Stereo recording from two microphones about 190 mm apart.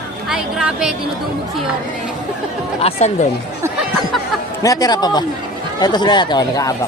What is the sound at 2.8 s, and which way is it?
Speech, 35° left (ahead or behind).